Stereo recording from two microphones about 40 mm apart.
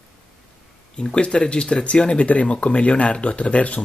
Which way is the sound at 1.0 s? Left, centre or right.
Left.